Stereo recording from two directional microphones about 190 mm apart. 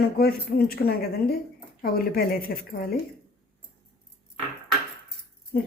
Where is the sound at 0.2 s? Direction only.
55° left (ahead or behind).